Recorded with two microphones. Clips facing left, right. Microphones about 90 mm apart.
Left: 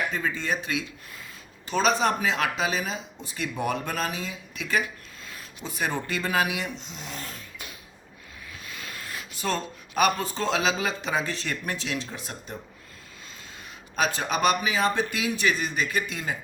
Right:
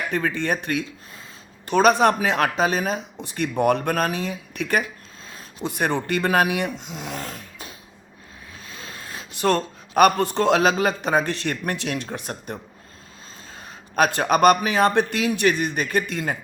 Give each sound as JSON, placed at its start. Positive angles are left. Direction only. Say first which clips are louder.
{"t": 0.1, "sound": "a man's voice", "louder": "right 5 dB", "side_deg": -65}
{"t": 3.2, "sound": "a man's voice", "louder": "right 8 dB", "side_deg": -60}
{"t": 5.2, "sound": "a sound", "louder": "right 4 dB", "side_deg": -30}
{"t": 5.6, "sound": "a man's voice", "louder": "right 6 dB", "side_deg": -65}
{"t": 7.2, "sound": "a sound", "louder": "right 5 dB", "side_deg": -35}
{"t": 9.3, "sound": "a man's voice", "louder": "right 8 dB", "side_deg": -65}
{"t": 13.9, "sound": "a man's voice", "louder": "right 7 dB", "side_deg": -55}